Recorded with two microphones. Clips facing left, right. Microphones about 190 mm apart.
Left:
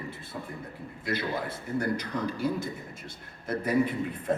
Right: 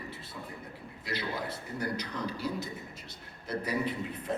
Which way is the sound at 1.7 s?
50° left (ahead or behind).